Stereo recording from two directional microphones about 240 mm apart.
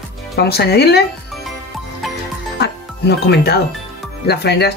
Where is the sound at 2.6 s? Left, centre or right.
Left.